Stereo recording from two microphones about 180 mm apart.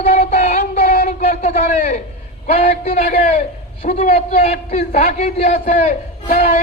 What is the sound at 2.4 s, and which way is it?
A man's voice, 35° left (ahead or behind).